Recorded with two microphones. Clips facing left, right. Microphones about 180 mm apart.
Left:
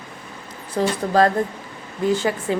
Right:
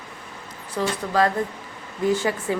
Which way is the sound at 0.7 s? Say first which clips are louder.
Left 4 dB; 40° left (ahead or behind).